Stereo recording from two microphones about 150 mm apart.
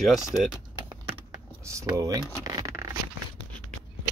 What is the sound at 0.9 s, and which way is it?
Typing, 20° right (ahead or behind).